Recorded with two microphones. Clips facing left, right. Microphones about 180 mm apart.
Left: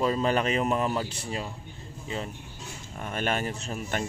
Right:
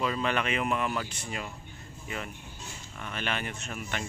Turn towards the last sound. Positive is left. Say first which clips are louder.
# left 5 dB
turn(degrees=40)  # may be behind; listen again after turning